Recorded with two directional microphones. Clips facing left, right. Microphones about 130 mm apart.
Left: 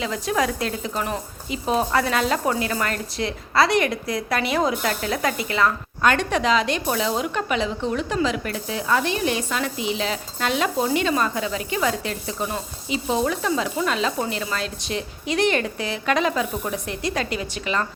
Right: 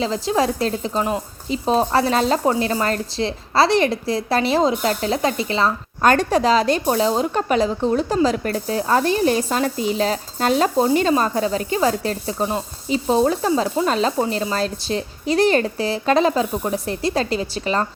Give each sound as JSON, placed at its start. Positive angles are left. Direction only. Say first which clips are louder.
{"t": 0.0, "sound": "speech", "louder": "right 4 dB", "side_deg": -30}
{"t": 6.0, "sound": "speech", "louder": "right 4 dB", "side_deg": -40}